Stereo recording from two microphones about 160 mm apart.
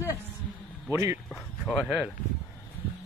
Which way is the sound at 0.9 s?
20° right (ahead or behind).